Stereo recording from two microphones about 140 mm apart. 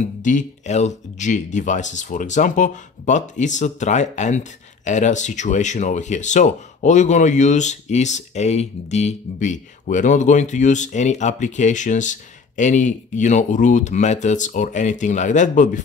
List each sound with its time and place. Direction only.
0.2 s speech: 65° left (ahead or behind)